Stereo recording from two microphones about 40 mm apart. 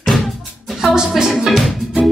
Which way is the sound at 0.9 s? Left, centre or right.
Centre.